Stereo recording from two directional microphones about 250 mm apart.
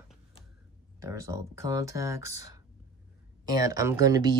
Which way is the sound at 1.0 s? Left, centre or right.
Centre.